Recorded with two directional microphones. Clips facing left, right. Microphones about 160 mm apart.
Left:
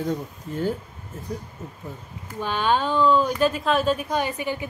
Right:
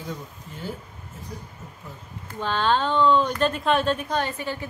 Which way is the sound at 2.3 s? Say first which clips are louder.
Even; 10° left (ahead or behind).